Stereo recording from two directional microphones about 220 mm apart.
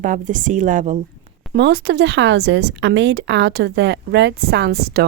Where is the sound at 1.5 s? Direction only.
45° right (ahead or behind).